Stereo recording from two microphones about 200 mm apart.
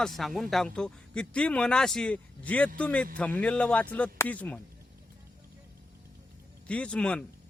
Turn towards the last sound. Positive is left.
turn(degrees=5)  # may be behind; listen again after turning